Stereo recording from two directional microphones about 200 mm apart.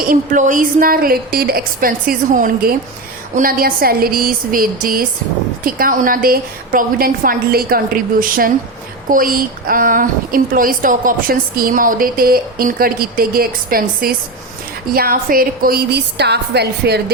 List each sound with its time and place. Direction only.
0.1 s a woman's voice: 40° right (ahead or behind)